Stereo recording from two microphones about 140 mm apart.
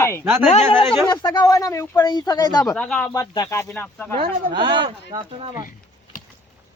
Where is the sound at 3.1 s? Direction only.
20° left (ahead or behind).